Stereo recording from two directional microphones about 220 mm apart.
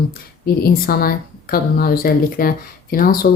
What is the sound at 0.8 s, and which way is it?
Speech, 40° left (ahead or behind).